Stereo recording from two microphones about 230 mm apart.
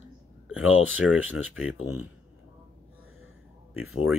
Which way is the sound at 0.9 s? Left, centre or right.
Centre.